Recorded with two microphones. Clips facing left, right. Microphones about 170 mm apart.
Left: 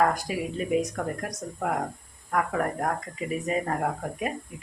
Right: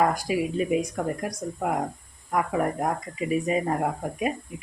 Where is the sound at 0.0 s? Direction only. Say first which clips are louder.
Right 1 dB; 10° right (ahead or behind).